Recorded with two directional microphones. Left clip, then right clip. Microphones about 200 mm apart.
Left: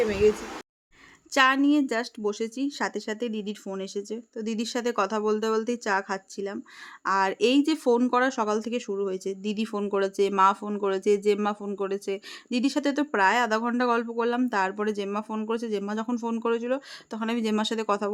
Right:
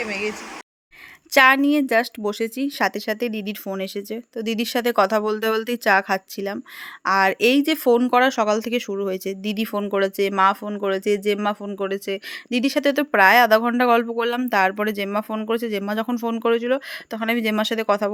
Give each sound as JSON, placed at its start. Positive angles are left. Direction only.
{"t": 1.3, "sound": "speech", "side_deg": -20}